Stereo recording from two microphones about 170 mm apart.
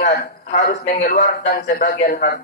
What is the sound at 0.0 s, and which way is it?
Speech, 65° left (ahead or behind).